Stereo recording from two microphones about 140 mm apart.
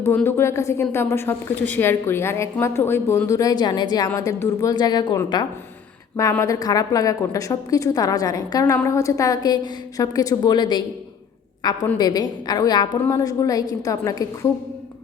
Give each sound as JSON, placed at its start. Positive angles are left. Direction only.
{"t": 0.0, "sound": "a woman's voice", "side_deg": 15}